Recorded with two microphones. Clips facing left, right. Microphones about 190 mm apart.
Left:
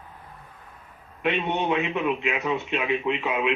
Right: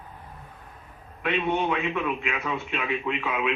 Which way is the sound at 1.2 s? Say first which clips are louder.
Even; 20° left (ahead or behind).